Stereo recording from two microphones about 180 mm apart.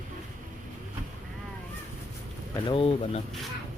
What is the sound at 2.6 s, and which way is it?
Speech, 30° left (ahead or behind).